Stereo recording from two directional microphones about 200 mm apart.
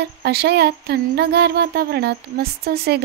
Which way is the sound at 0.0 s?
55° right (ahead or behind).